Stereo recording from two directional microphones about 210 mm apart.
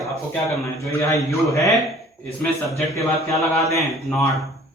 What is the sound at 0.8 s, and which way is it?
A man's voice, 15° left (ahead or behind).